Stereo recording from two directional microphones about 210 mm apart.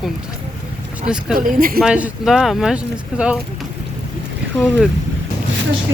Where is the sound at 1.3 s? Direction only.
40° right (ahead or behind).